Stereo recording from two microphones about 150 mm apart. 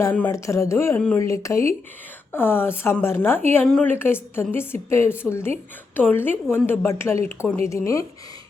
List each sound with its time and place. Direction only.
0.4 s a woman's voice: 20° left (ahead or behind)